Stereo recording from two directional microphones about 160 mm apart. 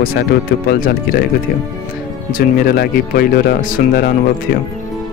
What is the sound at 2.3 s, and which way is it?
Speech, 75° left (ahead or behind).